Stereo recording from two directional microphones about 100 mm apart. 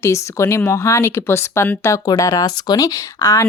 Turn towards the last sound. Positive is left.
turn(degrees=35)  # may be behind; listen again after turning